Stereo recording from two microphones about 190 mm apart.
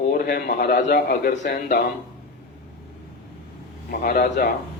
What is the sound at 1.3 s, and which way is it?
Speech, 45° left (ahead or behind).